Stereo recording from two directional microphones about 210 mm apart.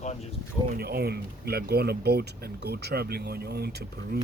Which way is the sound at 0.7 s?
50° right (ahead or behind).